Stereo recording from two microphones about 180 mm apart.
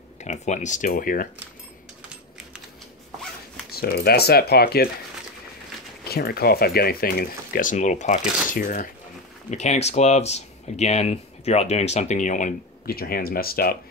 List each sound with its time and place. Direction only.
0.2 s speech: 40° left (ahead or behind)
3.7 s speech: 60° left (ahead or behind)
6.0 s speech: 60° left (ahead or behind)